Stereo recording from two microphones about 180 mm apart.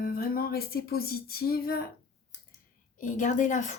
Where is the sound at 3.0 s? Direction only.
45° left (ahead or behind).